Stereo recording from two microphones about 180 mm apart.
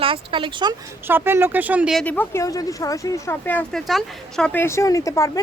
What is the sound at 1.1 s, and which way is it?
Speech, 10° right (ahead or behind).